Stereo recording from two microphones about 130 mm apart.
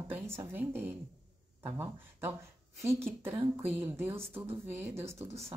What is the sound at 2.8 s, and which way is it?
Speech, 20° right (ahead or behind).